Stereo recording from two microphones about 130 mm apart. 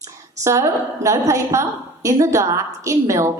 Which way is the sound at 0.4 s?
25° right (ahead or behind).